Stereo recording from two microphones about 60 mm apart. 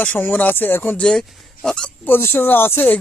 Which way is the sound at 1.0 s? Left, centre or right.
Centre.